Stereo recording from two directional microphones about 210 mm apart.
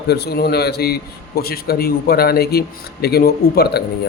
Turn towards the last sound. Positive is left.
turn(degrees=50)  # may be behind; listen again after turning